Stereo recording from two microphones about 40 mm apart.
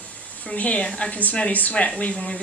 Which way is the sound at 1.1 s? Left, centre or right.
Left.